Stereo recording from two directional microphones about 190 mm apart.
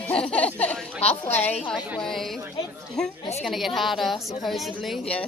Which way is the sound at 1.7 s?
Centre (ahead or behind).